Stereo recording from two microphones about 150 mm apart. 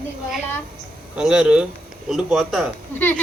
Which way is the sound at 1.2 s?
5° right (ahead or behind).